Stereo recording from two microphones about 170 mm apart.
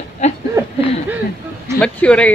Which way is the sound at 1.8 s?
5° left (ahead or behind).